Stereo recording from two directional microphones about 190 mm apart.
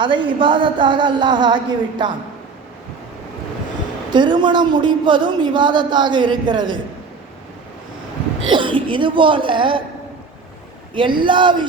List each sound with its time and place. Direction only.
0.0 s a man's voice: 25° right (ahead or behind)
4.1 s a man's voice: 25° right (ahead or behind)
8.4 s a man's voice: 25° right (ahead or behind)
10.9 s a man's voice: 25° right (ahead or behind)